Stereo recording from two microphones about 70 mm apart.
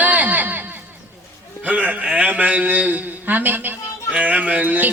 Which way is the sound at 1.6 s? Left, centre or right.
Right.